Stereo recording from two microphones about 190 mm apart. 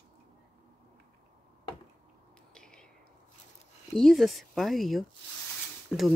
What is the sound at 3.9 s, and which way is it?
Speech, centre (ahead or behind).